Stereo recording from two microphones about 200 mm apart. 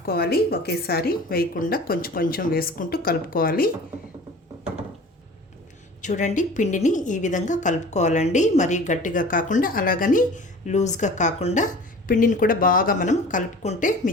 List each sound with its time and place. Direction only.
0.0 s a woman's voice: 50° left (ahead or behind)
6.0 s a woman's voice: 40° left (ahead or behind)